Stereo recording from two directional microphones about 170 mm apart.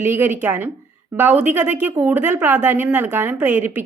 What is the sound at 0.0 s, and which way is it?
A woman's voice, 10° right (ahead or behind).